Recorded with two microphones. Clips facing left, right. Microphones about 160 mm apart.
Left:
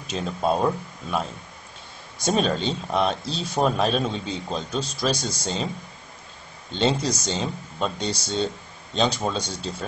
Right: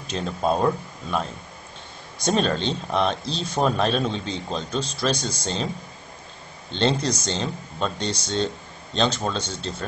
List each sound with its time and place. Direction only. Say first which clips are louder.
0.0 s speech: even; 5° left (ahead or behind)
6.7 s speech: even; 5° left (ahead or behind)